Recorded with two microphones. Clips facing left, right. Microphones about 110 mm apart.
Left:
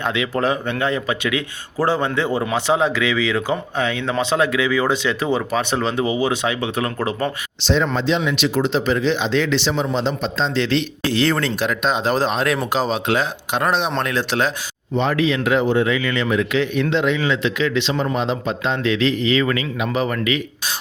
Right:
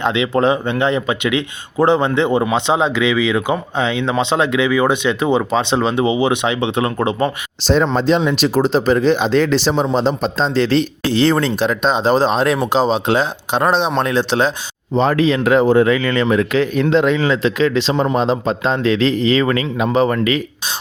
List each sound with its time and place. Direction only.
0.0 s speech: 25° right (ahead or behind)
7.6 s speech: 45° right (ahead or behind); by 14.5 s 25° right (ahead or behind)
14.9 s speech: 40° right (ahead or behind)